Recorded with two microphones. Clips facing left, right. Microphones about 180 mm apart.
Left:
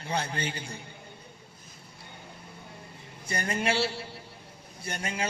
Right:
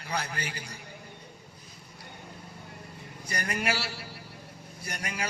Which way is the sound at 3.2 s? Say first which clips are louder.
Left 2 dB; 25° left (ahead or behind).